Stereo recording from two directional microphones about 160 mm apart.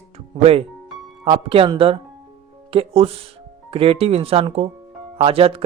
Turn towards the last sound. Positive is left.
turn(degrees=-35)  # may be behind; listen again after turning